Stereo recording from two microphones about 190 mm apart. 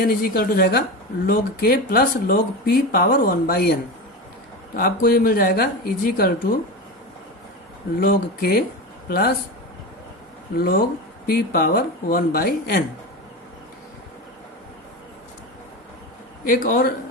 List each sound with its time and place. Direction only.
0.0 s speech: 50° left (ahead or behind)
4.8 s speech: 50° left (ahead or behind)
7.9 s speech: 50° left (ahead or behind)
10.6 s speech: 50° left (ahead or behind)
16.5 s speech: 50° left (ahead or behind)